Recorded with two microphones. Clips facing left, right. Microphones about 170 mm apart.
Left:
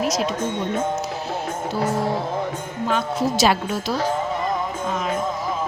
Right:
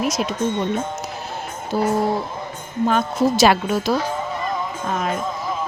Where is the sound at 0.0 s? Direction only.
55° right (ahead or behind).